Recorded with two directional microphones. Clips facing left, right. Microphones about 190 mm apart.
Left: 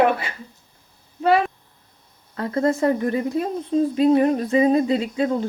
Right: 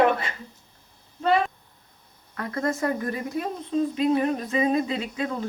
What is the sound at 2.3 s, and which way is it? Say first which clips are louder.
Speech: left 6 dB; 25° left (ahead or behind).